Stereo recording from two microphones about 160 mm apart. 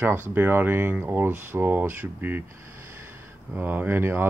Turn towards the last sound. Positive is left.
turn(degrees=-15)  # may be behind; listen again after turning